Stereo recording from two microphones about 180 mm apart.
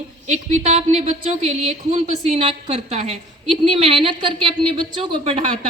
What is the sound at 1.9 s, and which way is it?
A woman's voice, 40° right (ahead or behind).